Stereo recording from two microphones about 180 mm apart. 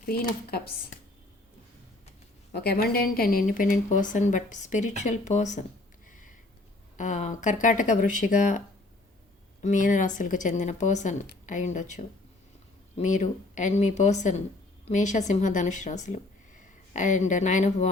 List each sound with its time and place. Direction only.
0.5 s speech: 60° left (ahead or behind)
2.5 s speech: 60° left (ahead or behind); by 5.6 s 40° left (ahead or behind)
6.9 s speech: 40° left (ahead or behind)